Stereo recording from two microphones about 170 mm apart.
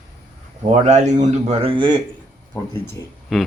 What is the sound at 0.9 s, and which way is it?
A man's voice, 45° right (ahead or behind).